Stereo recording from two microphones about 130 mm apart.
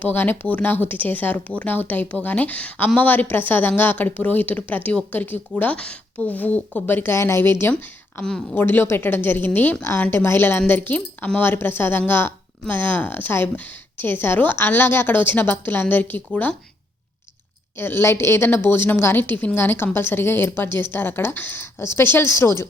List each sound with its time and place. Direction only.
0.0 s speech: 15° left (ahead or behind)
17.7 s speech: 15° left (ahead or behind)